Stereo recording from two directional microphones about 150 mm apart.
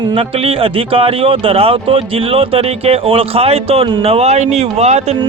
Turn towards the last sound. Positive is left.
turn(degrees=-45)  # may be behind; listen again after turning